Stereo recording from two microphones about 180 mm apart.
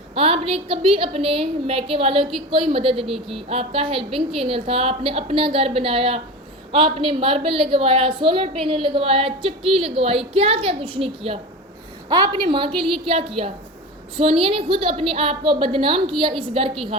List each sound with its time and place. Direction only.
0.1 s a woman's voice: 30° right (ahead or behind)